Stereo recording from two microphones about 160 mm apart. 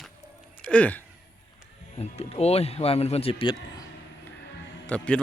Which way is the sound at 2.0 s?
40° left (ahead or behind).